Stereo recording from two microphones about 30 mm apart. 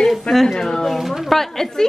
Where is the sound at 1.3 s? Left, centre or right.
Centre.